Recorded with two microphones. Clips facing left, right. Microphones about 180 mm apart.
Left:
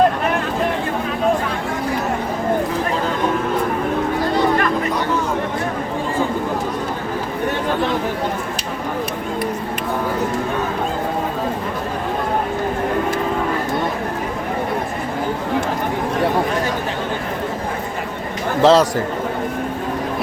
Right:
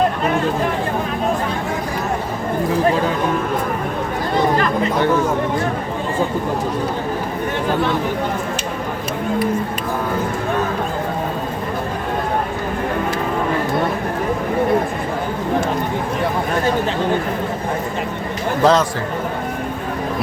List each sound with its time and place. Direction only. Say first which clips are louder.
18.6 s a man's voice: left 2 dB; 30° left (ahead or behind)